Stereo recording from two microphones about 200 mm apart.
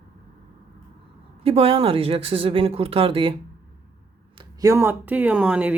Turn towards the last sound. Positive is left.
turn(degrees=-5)  # may be behind; listen again after turning